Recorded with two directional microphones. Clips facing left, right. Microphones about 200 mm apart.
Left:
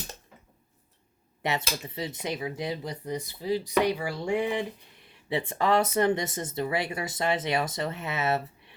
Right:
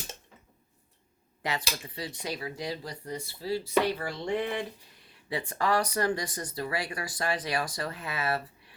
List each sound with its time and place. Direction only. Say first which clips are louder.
1.4 s speech: left 3 dB; 25° left (ahead or behind)
5.3 s speech: left 3 dB; 25° left (ahead or behind)